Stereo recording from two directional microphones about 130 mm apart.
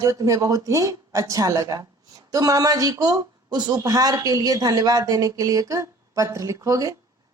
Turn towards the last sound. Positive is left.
turn(degrees=-25)  # may be behind; listen again after turning